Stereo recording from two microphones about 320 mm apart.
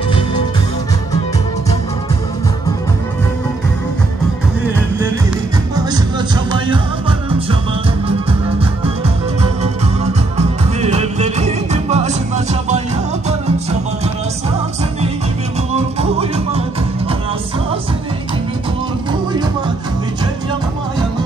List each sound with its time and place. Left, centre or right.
6.5 s music: centre
9.4 s music: centre
15.7 s music: centre